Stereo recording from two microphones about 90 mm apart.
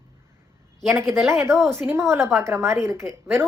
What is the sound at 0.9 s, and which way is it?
A woman's voice, 30° right (ahead or behind).